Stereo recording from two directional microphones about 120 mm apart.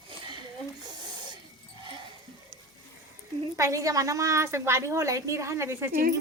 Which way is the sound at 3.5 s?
25° right (ahead or behind).